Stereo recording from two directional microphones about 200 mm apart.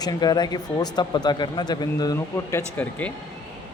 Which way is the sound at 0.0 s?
20° left (ahead or behind).